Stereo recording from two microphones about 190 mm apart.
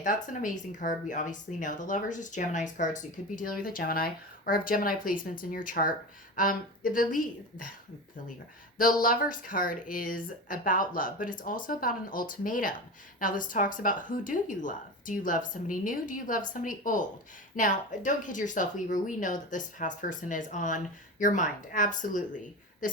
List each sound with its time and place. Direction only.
0.0 s speech: 45° left (ahead or behind)
8.8 s speech: 45° left (ahead or behind)